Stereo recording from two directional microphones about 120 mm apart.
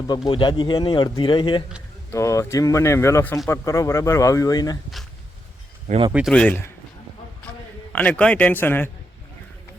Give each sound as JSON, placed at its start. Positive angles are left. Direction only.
{"t": 0.3, "sound": "speech", "side_deg": 40}
{"t": 2.1, "sound": "speech", "side_deg": 25}
{"t": 5.9, "sound": "speech", "side_deg": -80}
{"t": 6.3, "sound": "speech", "side_deg": 10}
{"t": 7.9, "sound": "speech", "side_deg": 10}